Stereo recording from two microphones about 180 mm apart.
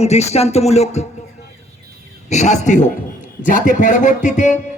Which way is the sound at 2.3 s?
40° left (ahead or behind).